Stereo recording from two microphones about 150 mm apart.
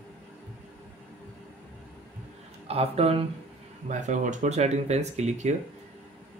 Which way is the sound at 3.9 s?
55° right (ahead or behind).